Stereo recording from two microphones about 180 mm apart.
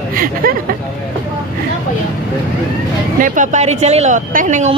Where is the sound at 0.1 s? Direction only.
50° right (ahead or behind).